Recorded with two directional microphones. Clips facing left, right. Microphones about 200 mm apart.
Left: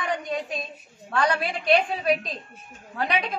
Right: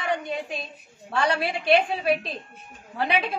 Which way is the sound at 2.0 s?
30° right (ahead or behind).